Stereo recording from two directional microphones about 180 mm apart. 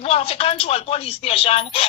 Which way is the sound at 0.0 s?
35° left (ahead or behind).